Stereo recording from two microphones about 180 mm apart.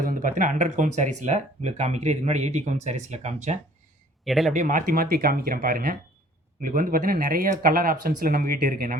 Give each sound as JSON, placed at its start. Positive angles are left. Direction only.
{"t": 0.0, "sound": "speech", "side_deg": -50}
{"t": 4.2, "sound": "speech", "side_deg": 0}
{"t": 4.5, "sound": "speech", "side_deg": -45}